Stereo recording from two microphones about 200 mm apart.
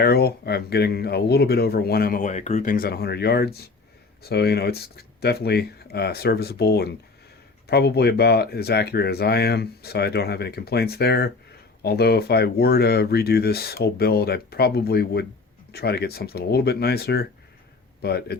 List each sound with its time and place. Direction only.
0.0 s speech: 50° left (ahead or behind)